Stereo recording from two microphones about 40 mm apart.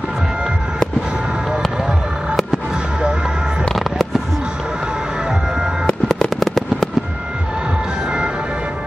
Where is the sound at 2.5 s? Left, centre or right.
Right.